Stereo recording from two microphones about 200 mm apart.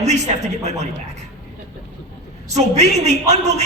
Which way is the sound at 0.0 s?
35° right (ahead or behind).